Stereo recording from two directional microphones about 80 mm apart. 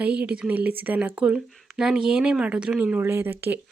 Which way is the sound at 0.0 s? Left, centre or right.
Centre.